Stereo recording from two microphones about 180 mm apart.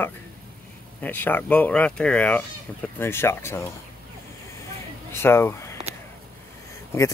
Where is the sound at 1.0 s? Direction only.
10° left (ahead or behind).